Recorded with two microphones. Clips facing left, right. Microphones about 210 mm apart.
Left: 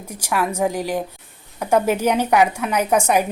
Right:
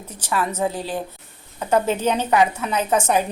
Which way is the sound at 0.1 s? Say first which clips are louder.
Left 2 dB; 10° left (ahead or behind).